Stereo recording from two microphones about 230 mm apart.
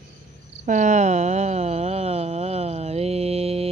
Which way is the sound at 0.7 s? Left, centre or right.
Right.